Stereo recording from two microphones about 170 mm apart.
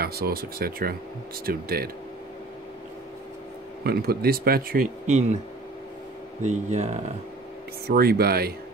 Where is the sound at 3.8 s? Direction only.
65° right (ahead or behind).